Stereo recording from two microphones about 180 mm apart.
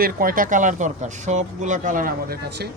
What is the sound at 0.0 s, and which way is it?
Speech, 55° right (ahead or behind).